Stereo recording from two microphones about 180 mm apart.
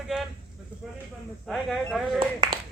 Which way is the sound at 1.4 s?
Centre (ahead or behind).